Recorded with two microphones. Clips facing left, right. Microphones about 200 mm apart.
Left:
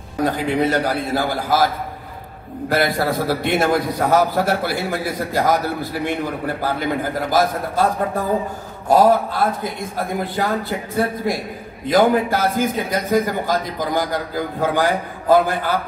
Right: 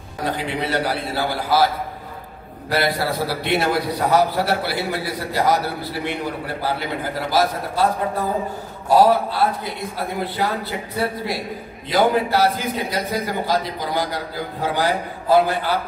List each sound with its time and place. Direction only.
0.2 s a man's voice: 45° left (ahead or behind)
2.7 s a man's voice: 50° left (ahead or behind)